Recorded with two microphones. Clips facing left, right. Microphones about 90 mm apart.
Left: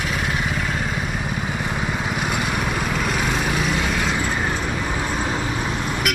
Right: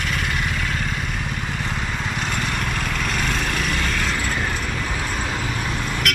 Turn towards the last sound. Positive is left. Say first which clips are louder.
# left 1 dB
turn(degrees=5)  # may be behind; listen again after turning